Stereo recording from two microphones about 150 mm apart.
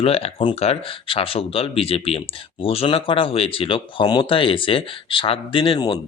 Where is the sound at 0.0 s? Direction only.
40° left (ahead or behind).